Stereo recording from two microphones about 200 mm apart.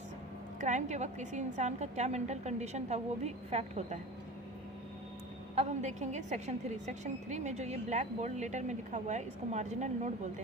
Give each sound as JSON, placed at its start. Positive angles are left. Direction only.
{"t": 0.6, "sound": "a woman's voice", "side_deg": -35}
{"t": 5.5, "sound": "a woman's voice", "side_deg": -35}